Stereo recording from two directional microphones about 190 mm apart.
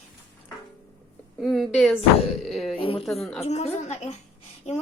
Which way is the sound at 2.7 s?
30° left (ahead or behind).